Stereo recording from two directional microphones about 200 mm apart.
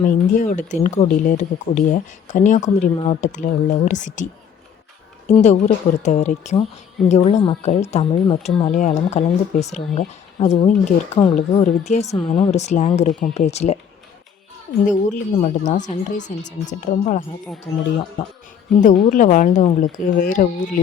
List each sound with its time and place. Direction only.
0.0 s speech: 40° left (ahead or behind)
5.3 s speech: 35° left (ahead or behind)
8.7 s speech: 35° left (ahead or behind)
14.8 s speech: 40° left (ahead or behind)
18.9 s speech: 40° left (ahead or behind)